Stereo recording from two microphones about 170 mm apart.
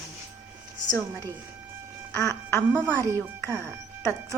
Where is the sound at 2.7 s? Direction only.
15° right (ahead or behind).